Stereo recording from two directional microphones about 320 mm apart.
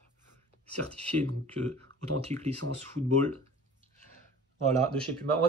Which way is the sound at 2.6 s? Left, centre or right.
Right.